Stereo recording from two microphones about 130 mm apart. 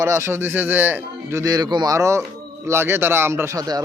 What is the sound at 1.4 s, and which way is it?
A man's voice, 30° right (ahead or behind).